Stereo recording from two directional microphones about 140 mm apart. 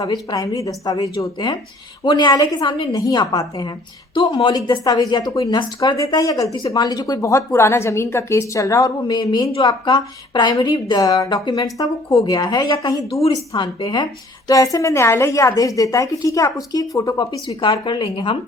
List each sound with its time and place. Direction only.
0.0 s a woman's voice: 30° left (ahead or behind)